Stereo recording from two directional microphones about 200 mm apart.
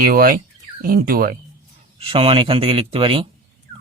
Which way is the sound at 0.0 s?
50° right (ahead or behind).